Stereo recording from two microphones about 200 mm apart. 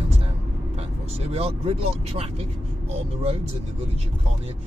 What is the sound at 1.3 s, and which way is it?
Speech, 30° right (ahead or behind).